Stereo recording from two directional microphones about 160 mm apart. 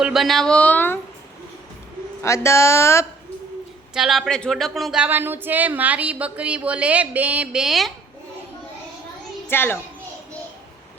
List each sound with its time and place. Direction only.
0.0 s speech: centre (ahead or behind)
2.2 s speech: 15° left (ahead or behind)
3.9 s speech: centre (ahead or behind)
9.5 s speech: 15° left (ahead or behind)